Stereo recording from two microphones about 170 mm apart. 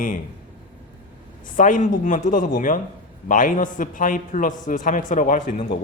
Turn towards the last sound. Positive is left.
turn(degrees=50)  # may be behind; listen again after turning